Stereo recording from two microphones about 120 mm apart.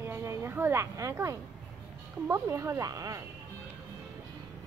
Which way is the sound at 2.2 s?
25° right (ahead or behind).